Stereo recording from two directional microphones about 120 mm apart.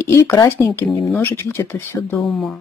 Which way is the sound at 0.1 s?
25° left (ahead or behind).